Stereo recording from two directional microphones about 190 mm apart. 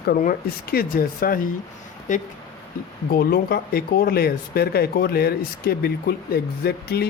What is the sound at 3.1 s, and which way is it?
Speech, 50° left (ahead or behind).